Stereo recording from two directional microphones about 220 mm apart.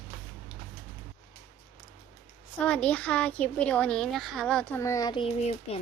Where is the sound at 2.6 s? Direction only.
5° left (ahead or behind).